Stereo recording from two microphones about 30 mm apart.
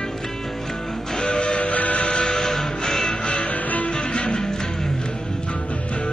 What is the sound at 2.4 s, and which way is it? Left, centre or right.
Music, centre.